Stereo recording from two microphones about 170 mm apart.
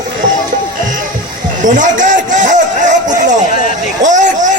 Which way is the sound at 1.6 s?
50° right (ahead or behind).